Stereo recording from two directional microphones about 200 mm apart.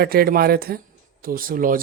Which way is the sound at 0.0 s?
50° right (ahead or behind).